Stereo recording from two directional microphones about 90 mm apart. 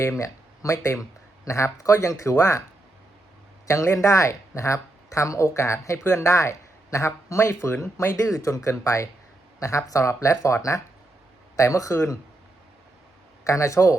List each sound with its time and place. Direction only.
0.0 s speech: 35° left (ahead or behind)
3.7 s speech: 35° left (ahead or behind)
13.4 s speech: 35° left (ahead or behind)